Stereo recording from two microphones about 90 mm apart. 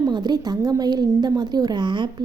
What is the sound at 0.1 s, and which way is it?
A woman's voice, 50° right (ahead or behind).